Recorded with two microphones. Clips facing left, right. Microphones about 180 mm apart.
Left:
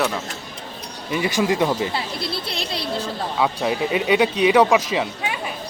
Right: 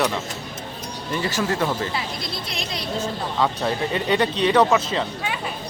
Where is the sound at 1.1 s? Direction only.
15° left (ahead or behind).